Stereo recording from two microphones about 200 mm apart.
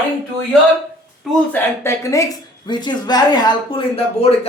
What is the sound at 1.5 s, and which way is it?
Speech, 15° left (ahead or behind).